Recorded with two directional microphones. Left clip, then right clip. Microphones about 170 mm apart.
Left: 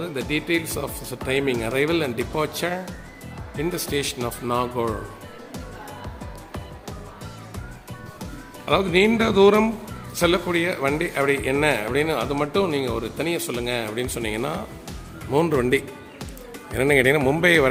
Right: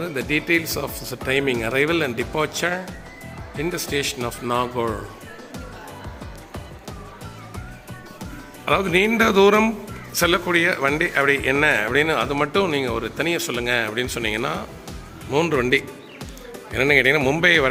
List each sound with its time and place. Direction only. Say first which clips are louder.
0.0 s speech: right 3 dB; centre (ahead or behind)
8.2 s speech: right 5 dB; 5° left (ahead or behind)